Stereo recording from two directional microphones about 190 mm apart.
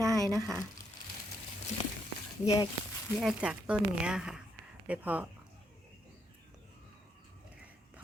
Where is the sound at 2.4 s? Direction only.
20° left (ahead or behind).